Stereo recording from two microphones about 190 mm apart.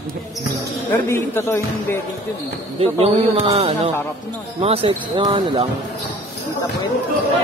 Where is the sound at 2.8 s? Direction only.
30° right (ahead or behind).